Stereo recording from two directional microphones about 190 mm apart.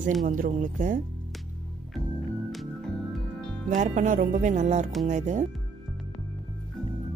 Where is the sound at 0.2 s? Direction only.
45° right (ahead or behind).